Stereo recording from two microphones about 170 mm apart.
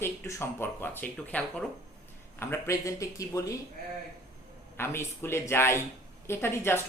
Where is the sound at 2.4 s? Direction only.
15° left (ahead or behind).